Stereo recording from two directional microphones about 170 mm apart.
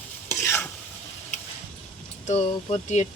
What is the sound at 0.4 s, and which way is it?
Stir, 15° left (ahead or behind).